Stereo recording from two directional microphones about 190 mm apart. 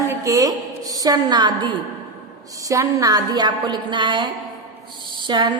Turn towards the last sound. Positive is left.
turn(degrees=-25)  # may be behind; listen again after turning